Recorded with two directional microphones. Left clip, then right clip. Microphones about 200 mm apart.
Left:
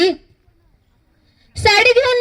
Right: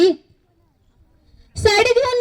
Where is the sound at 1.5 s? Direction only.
45° right (ahead or behind).